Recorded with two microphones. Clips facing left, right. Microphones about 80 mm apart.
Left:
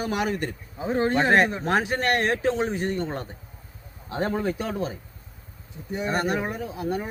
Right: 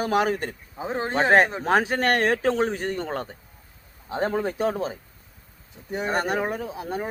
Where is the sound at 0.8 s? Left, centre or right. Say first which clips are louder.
Left 2 dB; right.